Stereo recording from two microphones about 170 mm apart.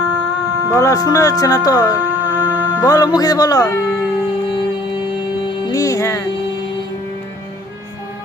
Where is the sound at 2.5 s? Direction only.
15° left (ahead or behind).